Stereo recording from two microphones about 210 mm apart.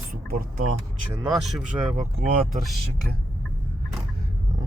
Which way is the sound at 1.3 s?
Centre (ahead or behind).